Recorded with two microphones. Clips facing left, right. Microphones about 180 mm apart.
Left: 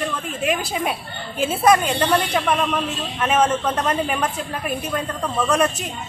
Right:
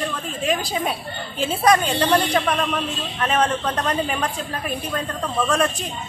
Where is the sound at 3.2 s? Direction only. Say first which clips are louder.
Left 2 dB; 5° left (ahead or behind).